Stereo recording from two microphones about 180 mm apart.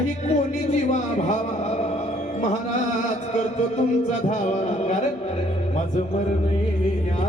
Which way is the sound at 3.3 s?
40° left (ahead or behind).